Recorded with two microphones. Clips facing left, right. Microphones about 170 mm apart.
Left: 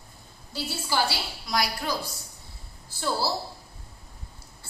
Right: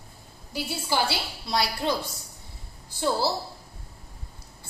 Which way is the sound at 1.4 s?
30° right (ahead or behind).